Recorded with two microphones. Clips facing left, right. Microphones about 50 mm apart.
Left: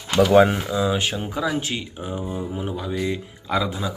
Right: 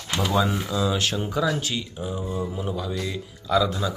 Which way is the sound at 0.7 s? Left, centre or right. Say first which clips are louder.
Left 2 dB; left.